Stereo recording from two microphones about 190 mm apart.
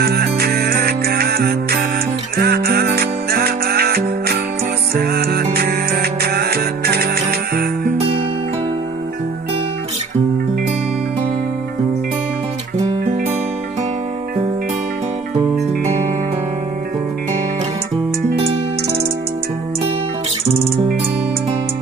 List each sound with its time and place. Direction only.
0.0 s music: 55° right (ahead or behind)
18.2 s music: 30° right (ahead or behind)